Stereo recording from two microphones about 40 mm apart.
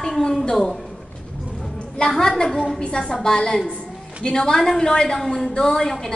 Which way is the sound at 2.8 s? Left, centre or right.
Left.